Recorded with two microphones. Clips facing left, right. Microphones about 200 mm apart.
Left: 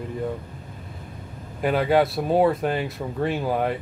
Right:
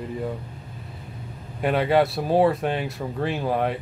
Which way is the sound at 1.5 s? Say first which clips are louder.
Even; centre (ahead or behind).